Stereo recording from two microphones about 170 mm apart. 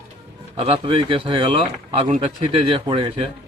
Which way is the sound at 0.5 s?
35° right (ahead or behind).